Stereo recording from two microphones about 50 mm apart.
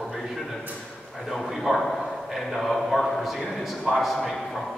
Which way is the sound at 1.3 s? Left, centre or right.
Centre.